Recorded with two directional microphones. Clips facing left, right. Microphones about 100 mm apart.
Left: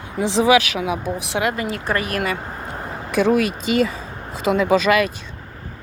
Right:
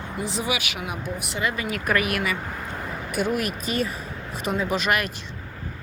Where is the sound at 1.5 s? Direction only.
30° left (ahead or behind).